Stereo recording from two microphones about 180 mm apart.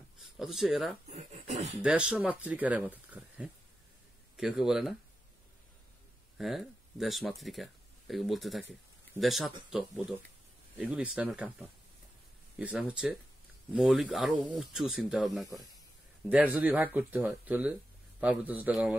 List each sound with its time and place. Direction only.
0.2 s speech: centre (ahead or behind)
1.1 s a sound: 40° right (ahead or behind)
1.8 s speech: 5° right (ahead or behind)
6.3 s speech: centre (ahead or behind)